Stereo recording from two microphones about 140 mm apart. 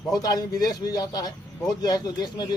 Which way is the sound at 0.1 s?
25° left (ahead or behind).